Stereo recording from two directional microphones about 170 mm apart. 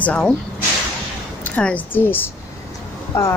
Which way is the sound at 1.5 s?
10° left (ahead or behind).